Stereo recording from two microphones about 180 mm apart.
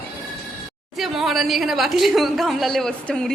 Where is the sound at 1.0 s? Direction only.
Centre (ahead or behind).